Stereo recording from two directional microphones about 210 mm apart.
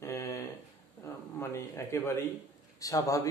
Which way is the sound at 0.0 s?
15° left (ahead or behind).